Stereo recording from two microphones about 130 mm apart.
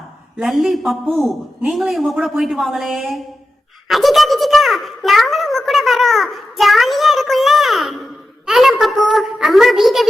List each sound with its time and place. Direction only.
0.3 s a child's voice: centre (ahead or behind)